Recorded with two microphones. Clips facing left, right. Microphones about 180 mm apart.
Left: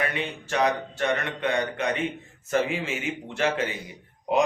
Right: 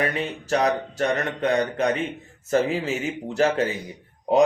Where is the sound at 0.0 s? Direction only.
40° right (ahead or behind).